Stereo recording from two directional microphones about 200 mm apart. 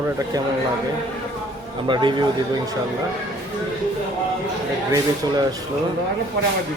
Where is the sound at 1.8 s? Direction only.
25° right (ahead or behind).